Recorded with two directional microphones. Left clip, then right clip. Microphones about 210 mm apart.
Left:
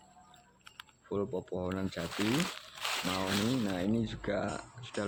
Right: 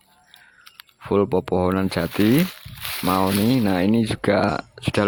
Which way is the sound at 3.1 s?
45° right (ahead or behind).